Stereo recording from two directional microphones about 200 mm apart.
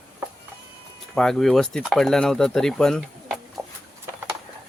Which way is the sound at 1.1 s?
5° left (ahead or behind).